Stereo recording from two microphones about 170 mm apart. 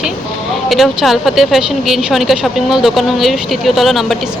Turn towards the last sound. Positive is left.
turn(degrees=0)  # may be behind; listen again after turning